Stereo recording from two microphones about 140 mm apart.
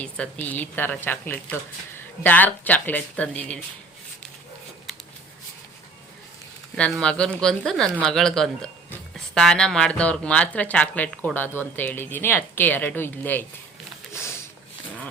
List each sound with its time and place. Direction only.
0.0 s speech: 10° left (ahead or behind)
6.7 s speech: 5° left (ahead or behind)
14.1 s a sound: 20° left (ahead or behind)